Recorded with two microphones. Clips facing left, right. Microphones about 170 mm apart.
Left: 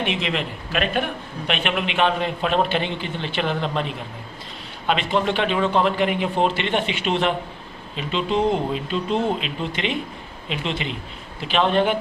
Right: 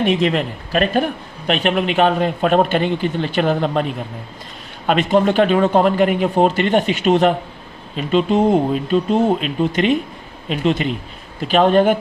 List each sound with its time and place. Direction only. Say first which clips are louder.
0.0 s a man's voice: right 8 dB; 40° right (ahead or behind)